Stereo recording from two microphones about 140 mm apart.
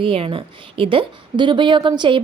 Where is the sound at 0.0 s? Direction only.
40° right (ahead or behind).